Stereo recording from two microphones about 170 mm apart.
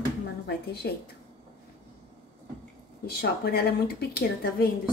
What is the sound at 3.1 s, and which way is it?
Speech, 65° left (ahead or behind).